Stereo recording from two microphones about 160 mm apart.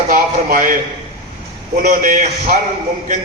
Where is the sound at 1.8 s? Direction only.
55° right (ahead or behind).